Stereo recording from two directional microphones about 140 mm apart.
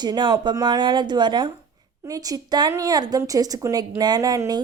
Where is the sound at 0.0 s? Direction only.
30° right (ahead or behind).